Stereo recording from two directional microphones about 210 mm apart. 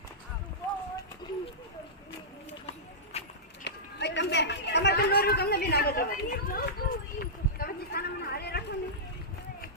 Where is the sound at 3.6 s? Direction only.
55° left (ahead or behind).